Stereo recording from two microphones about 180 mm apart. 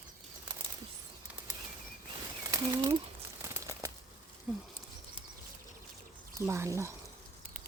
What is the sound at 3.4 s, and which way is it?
Crumpling, 15° right (ahead or behind).